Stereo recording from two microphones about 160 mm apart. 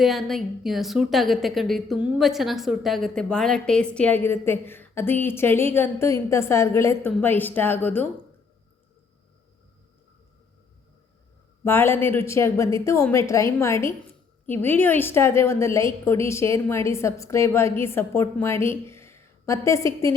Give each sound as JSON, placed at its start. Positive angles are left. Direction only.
{"t": 0.0, "sound": "a woman's voice", "side_deg": 0}
{"t": 11.6, "sound": "a woman's voice", "side_deg": 15}